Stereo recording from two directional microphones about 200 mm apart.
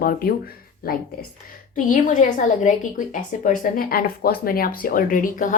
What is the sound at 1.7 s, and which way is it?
A woman's voice, 40° left (ahead or behind).